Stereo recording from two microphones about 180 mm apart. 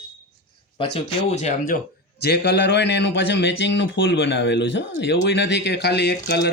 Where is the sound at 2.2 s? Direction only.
65° left (ahead or behind).